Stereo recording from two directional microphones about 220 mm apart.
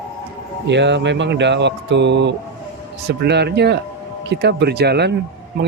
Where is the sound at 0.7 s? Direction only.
55° right (ahead or behind).